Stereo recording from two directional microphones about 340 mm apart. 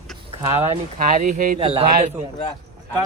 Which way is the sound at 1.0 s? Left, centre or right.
Right.